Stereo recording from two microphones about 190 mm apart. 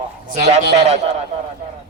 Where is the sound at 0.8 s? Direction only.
35° right (ahead or behind).